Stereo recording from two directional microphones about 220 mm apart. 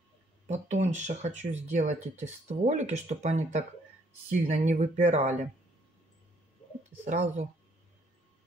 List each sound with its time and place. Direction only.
0.5 s speech: 35° right (ahead or behind)
7.1 s speech: 35° right (ahead or behind)